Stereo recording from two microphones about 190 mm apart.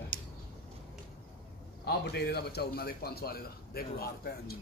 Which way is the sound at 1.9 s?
55° left (ahead or behind).